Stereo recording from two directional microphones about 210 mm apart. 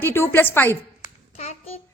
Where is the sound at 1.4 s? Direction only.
30° left (ahead or behind).